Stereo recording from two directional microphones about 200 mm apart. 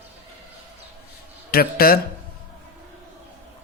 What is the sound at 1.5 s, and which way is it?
Speech, 50° left (ahead or behind).